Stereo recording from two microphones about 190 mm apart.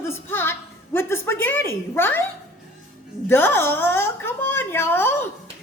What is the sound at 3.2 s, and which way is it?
A woman's voice, 10° left (ahead or behind).